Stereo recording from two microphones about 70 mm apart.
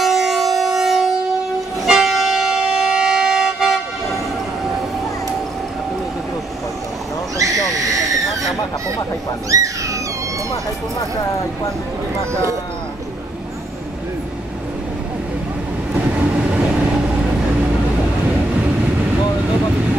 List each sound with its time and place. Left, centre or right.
0.0 s civil defense siren: centre
1.9 s vehicle: centre
7.3 s a sound: right
9.5 s dog: right
10.5 s speech: left
15.9 s train: centre